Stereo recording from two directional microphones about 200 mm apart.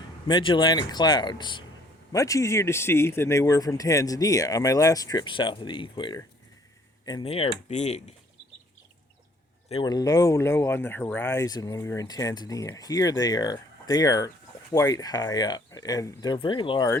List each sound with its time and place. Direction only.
0.3 s speech: 25° left (ahead or behind)
9.6 s speech: 25° left (ahead or behind)